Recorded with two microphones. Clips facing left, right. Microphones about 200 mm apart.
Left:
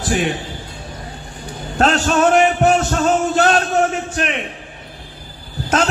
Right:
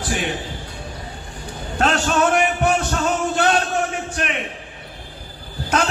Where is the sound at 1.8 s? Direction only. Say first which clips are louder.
Left 3 dB; 40° left (ahead or behind).